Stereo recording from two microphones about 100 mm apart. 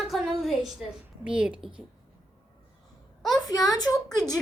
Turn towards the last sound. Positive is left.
turn(degrees=40)  # may be behind; listen again after turning